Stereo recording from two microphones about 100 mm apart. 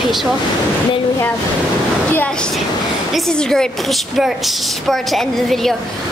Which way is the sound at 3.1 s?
5° left (ahead or behind).